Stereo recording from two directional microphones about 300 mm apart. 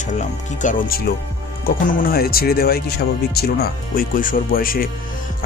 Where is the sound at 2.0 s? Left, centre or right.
Left.